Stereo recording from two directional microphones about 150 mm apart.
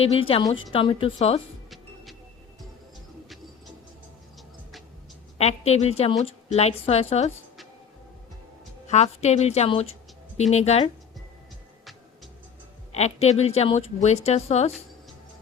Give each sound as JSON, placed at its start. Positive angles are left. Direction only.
{"t": 0.0, "sound": "a woman's voice", "side_deg": 35}
{"t": 5.4, "sound": "a woman's voice", "side_deg": 45}
{"t": 8.9, "sound": "a woman's voice", "side_deg": 45}
{"t": 12.9, "sound": "a woman's voice", "side_deg": 45}